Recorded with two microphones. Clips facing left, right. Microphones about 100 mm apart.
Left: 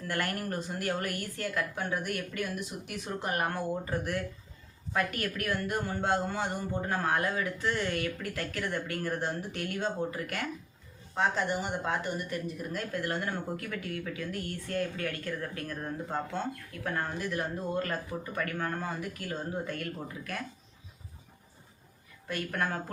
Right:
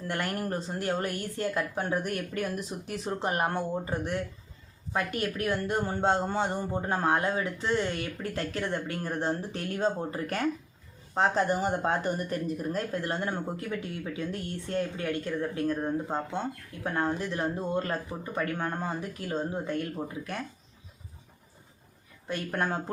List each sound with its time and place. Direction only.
0.0 s speech: 25° right (ahead or behind)
22.3 s speech: 25° right (ahead or behind)